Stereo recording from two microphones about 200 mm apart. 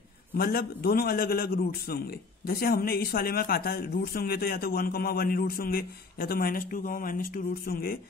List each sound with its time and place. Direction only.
0.4 s a man's voice: 50° left (ahead or behind)